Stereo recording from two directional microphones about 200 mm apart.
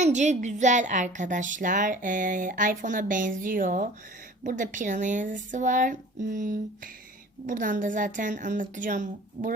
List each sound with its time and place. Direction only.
0.0 s speech: 35° right (ahead or behind)